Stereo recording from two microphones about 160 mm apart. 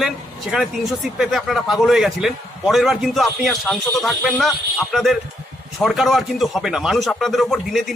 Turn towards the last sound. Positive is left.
turn(degrees=0)  # may be behind; listen again after turning